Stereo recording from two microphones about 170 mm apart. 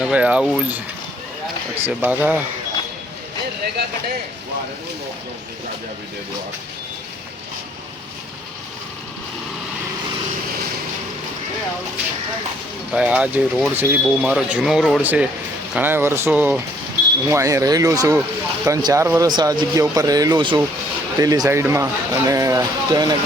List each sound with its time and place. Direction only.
0.0 s speech: 5° right (ahead or behind)
1.8 s speech: 10° right (ahead or behind)
12.9 s speech: 5° right (ahead or behind)